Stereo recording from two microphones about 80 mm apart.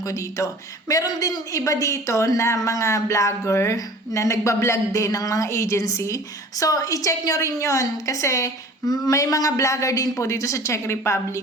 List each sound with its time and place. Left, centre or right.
0.0 s a woman's voice: left